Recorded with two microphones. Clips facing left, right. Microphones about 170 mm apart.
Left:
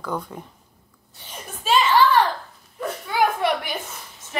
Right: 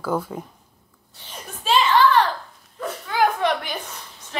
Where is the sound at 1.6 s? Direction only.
Centre (ahead or behind).